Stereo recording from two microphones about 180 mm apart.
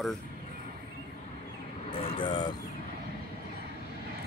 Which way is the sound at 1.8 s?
30° left (ahead or behind).